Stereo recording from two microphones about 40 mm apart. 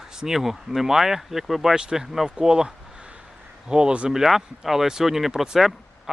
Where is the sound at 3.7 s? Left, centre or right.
Right.